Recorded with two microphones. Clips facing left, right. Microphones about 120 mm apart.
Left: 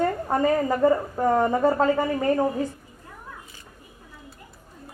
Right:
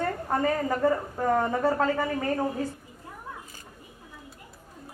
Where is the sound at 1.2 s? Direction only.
25° left (ahead or behind).